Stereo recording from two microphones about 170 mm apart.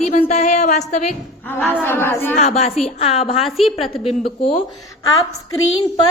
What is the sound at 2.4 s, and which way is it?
A woman's voice, 40° left (ahead or behind).